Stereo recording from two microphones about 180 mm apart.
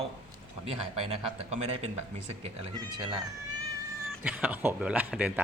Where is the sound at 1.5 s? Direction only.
35° right (ahead or behind).